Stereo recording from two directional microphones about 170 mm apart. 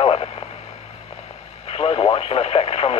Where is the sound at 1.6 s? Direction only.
35° left (ahead or behind).